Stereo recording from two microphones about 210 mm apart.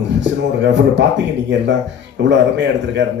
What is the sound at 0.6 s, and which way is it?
Speech, 60° right (ahead or behind).